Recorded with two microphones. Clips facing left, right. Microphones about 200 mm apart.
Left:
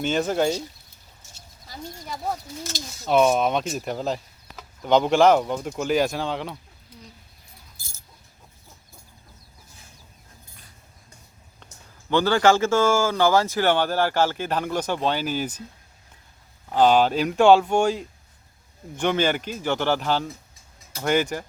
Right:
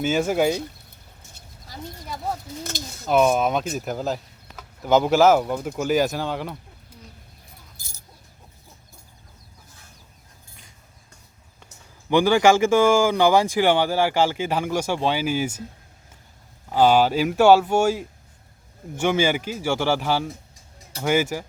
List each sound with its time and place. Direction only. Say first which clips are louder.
0.0 s speech: right 2 dB; 10° right (ahead or behind)
1.2 s a sound: right 2 dB; 60° right (ahead or behind)
2.7 s speech: right 1 dB; 55° right (ahead or behind)
3.1 s speech: even; centre (ahead or behind)
11.6 s speech: right 1 dB; 10° right (ahead or behind)
16.7 s speech: right 1 dB; 10° right (ahead or behind)